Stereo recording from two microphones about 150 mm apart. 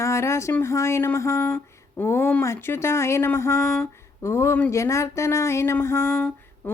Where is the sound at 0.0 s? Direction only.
20° left (ahead or behind).